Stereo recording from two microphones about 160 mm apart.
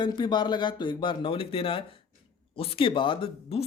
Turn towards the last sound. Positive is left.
turn(degrees=35)  # may be behind; listen again after turning